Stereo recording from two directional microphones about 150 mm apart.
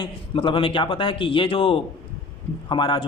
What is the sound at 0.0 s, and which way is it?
A man's voice, 35° left (ahead or behind).